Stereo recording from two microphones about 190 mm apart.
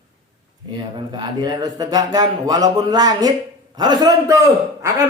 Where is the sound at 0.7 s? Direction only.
25° right (ahead or behind).